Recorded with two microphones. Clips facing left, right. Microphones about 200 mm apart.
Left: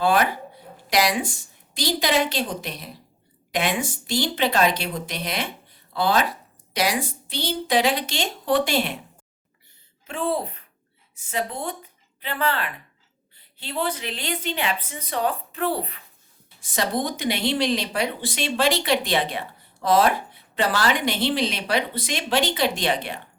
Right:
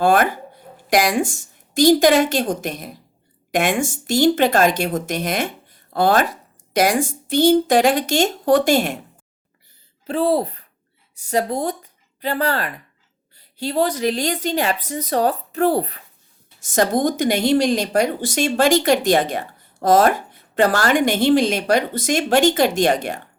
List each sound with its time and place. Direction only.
0.0 s a woman's voice: 50° right (ahead or behind)
10.1 s a woman's voice: 35° right (ahead or behind)